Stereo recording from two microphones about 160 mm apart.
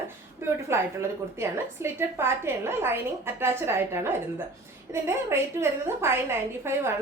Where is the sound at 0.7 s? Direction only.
15° right (ahead or behind).